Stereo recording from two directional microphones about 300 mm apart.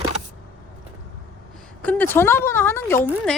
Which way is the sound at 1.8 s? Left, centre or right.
Centre.